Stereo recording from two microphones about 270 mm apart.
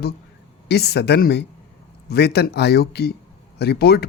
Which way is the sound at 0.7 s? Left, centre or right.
Left.